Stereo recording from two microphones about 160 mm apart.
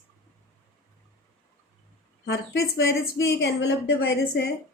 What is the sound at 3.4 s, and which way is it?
A woman's voice, 90° left.